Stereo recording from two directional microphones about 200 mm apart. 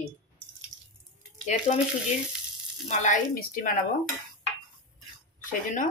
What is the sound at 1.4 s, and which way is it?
Speech, 35° left (ahead or behind).